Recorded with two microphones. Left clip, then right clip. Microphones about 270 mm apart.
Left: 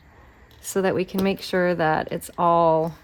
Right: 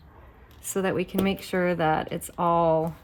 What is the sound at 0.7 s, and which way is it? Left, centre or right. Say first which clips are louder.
Speech: left 4 dB; left.